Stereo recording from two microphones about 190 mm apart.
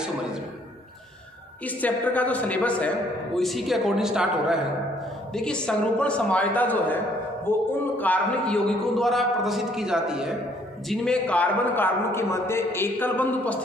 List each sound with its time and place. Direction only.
1.8 s a man's voice: 10° left (ahead or behind)